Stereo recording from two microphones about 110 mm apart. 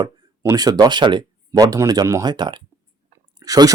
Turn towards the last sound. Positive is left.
turn(degrees=-35)  # may be behind; listen again after turning